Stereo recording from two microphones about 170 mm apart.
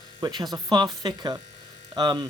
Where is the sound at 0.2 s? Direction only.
25° right (ahead or behind).